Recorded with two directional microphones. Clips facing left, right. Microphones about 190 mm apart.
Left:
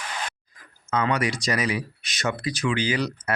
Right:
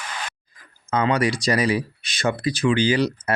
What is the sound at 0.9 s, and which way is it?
Speech, 30° right (ahead or behind).